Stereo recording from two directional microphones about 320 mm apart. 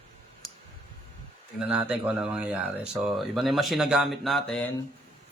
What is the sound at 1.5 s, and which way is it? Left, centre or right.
Speech, centre.